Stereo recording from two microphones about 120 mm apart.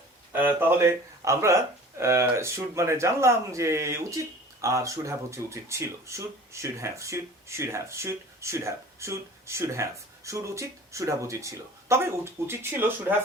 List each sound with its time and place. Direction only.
0.3 s speech: 15° right (ahead or behind)